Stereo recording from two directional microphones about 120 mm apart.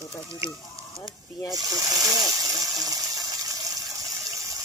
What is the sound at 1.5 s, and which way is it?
Speech, 30° right (ahead or behind).